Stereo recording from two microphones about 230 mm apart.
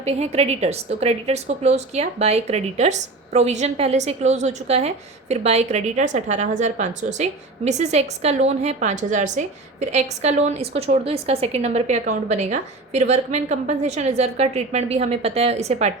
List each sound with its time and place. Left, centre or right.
0.0 s a woman's voice: right